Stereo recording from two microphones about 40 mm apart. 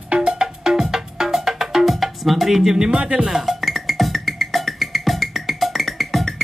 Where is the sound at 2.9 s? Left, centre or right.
Right.